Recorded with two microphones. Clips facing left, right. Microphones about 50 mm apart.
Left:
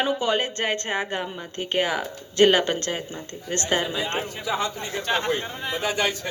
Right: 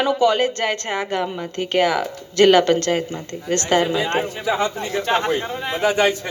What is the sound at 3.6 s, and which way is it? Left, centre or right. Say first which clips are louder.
A man's voice: right 6 dB; right.